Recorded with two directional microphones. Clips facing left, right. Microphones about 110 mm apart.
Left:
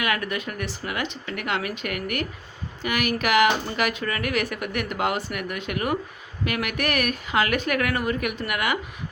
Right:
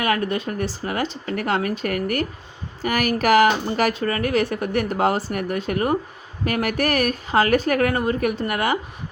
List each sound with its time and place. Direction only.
0.0 s a woman's voice: 35° right (ahead or behind)